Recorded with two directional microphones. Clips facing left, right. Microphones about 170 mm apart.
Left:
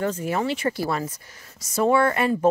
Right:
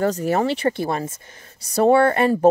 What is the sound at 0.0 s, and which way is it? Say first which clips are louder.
Speech: right 5 dB; 35° right (ahead or behind).